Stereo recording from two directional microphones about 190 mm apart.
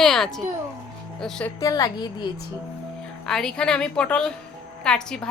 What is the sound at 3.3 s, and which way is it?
Speech, centre (ahead or behind).